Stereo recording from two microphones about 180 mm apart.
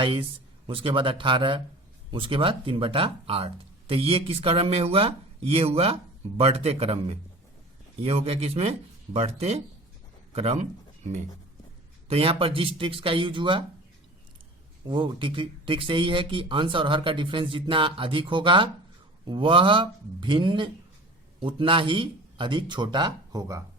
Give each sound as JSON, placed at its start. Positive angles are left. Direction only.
{"t": 0.0, "sound": "speech", "side_deg": -30}
{"t": 12.0, "sound": "speech", "side_deg": -35}
{"t": 14.8, "sound": "speech", "side_deg": -25}